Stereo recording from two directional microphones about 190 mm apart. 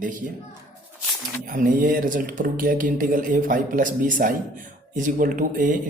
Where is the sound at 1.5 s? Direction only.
45° right (ahead or behind).